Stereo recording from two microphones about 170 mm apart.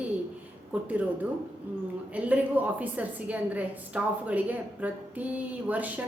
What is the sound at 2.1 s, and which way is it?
A woman's voice, 10° right (ahead or behind).